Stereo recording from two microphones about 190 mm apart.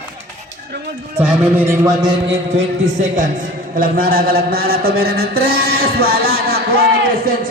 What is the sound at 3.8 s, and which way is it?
A man's voice, 50° right (ahead or behind).